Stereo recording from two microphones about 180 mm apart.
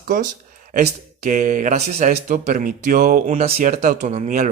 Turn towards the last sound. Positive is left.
turn(degrees=-40)  # may be behind; listen again after turning